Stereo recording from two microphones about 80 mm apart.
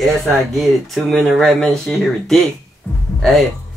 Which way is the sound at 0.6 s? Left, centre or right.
Centre.